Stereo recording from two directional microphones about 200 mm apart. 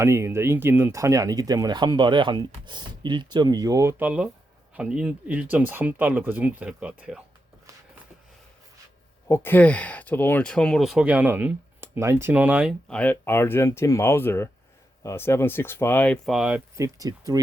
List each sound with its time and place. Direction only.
0.0 s speech: 15° right (ahead or behind)
9.3 s speech: 10° left (ahead or behind); by 12.7 s 5° right (ahead or behind)
12.9 s speech: 10° left (ahead or behind)
16.7 s speech: 15° right (ahead or behind)